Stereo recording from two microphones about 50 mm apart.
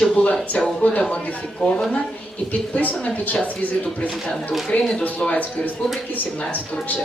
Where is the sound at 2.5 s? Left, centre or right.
Left.